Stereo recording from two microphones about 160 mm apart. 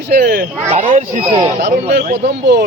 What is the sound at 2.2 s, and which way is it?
Speech, 90° right.